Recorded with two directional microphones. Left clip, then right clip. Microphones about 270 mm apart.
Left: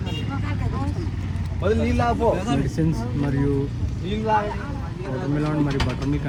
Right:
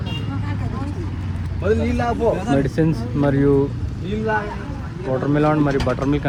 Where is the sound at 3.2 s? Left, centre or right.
Centre.